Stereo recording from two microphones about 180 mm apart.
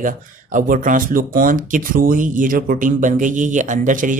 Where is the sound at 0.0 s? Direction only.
45° right (ahead or behind).